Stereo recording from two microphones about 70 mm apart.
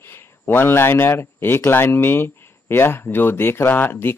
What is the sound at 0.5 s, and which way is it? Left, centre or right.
Speech, left.